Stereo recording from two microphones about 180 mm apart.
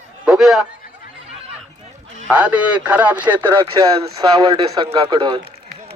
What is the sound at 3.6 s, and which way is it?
Speech, 25° right (ahead or behind).